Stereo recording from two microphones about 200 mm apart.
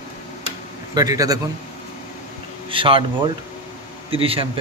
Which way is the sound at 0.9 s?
20° right (ahead or behind).